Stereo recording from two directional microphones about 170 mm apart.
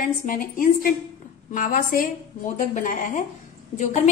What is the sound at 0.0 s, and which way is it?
A woman's voice, 55° left (ahead or behind).